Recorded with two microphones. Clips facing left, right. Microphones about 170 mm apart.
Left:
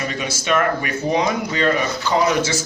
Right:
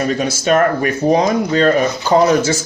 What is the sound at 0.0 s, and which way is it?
Speech, 45° right (ahead or behind).